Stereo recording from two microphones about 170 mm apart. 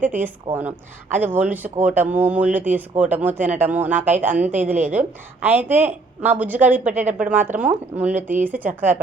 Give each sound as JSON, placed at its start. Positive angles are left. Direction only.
{"t": 0.5, "sound": "a woman's voice", "side_deg": -45}
{"t": 1.1, "sound": "speech", "side_deg": -10}